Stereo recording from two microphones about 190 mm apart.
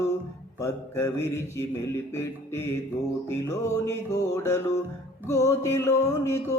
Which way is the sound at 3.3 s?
15° left (ahead or behind).